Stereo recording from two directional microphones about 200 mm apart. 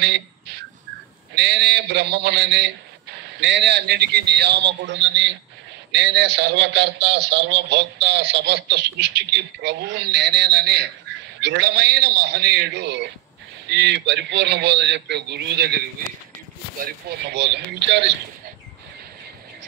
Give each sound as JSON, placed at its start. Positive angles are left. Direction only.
{"t": 0.0, "sound": "a sound", "side_deg": -55}
{"t": 1.3, "sound": "a man's voice", "side_deg": -55}
{"t": 16.8, "sound": "a man's voice", "side_deg": -55}